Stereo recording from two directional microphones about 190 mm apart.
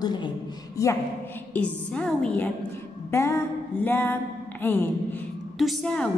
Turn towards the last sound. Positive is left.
turn(degrees=5)  # may be behind; listen again after turning